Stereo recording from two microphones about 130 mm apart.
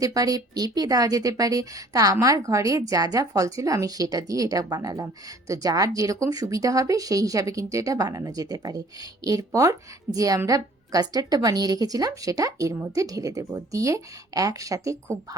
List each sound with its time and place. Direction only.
0.0 s a woman's voice: 30° right (ahead or behind)